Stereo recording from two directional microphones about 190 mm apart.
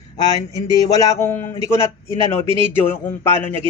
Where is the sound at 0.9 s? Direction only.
15° left (ahead or behind).